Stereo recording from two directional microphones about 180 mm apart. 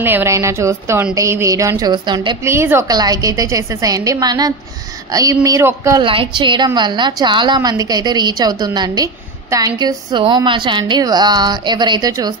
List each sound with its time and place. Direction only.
0.0 s a woman's voice: 15° right (ahead or behind)
2.4 s a woman's voice: 15° right (ahead or behind)
6.0 s a woman's voice: 30° right (ahead or behind)